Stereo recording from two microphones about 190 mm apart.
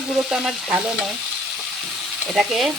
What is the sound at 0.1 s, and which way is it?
Frying, centre (ahead or behind).